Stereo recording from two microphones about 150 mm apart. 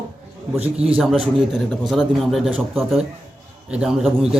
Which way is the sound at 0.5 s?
45° right (ahead or behind).